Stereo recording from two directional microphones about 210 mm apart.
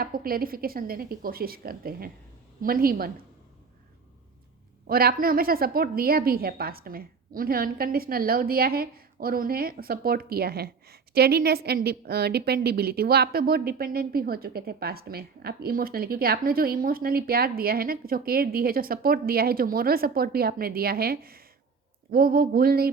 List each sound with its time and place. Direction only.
0.0 s a woman's voice: 45° right (ahead or behind)
4.9 s a woman's voice: 45° right (ahead or behind)